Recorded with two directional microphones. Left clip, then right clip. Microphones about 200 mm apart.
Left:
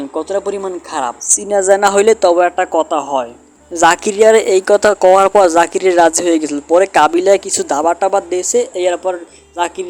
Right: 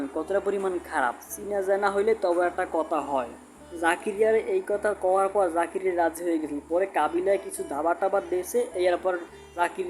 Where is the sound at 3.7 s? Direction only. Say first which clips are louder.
Left 15 dB; 45° left (ahead or behind).